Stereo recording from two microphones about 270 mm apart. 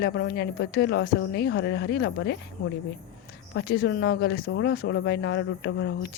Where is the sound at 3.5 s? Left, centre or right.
Left.